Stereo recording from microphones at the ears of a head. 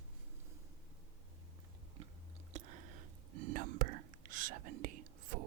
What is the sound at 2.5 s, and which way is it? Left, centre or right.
Whispering, right.